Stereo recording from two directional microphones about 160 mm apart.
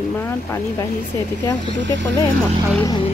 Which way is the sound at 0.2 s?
15° left (ahead or behind).